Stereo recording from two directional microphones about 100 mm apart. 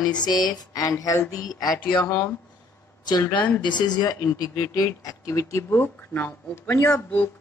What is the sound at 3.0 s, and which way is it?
Speech, 45° left (ahead or behind).